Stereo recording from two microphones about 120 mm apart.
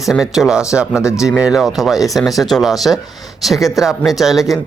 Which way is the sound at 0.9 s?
25° left (ahead or behind).